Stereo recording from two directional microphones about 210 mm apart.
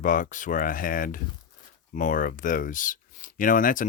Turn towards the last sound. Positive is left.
turn(degrees=40)  # may be behind; listen again after turning